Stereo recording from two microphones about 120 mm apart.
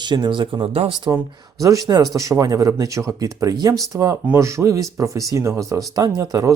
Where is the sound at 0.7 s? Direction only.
60° right (ahead or behind).